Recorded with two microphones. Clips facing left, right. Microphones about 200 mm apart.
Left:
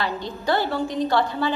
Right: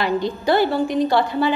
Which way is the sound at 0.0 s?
15° right (ahead or behind).